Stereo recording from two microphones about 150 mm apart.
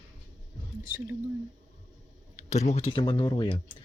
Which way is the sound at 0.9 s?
15° right (ahead or behind).